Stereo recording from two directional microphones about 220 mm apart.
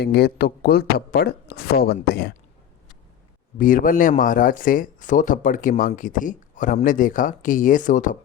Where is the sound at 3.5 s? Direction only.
40° left (ahead or behind).